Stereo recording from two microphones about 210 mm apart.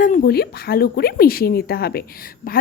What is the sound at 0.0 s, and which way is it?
Speech, 40° left (ahead or behind).